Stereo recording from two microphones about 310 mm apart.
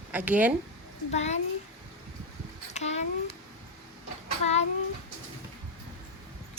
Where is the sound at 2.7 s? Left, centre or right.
Left.